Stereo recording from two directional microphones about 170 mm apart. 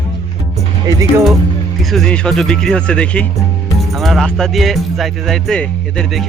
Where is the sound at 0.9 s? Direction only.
20° right (ahead or behind).